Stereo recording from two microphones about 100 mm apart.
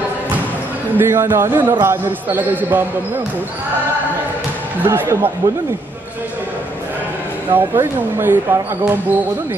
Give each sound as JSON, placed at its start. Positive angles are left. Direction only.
{"t": 0.9, "sound": "a man's voice", "side_deg": -25}
{"t": 4.8, "sound": "a man's voice", "side_deg": -20}
{"t": 7.5, "sound": "a man's voice", "side_deg": -20}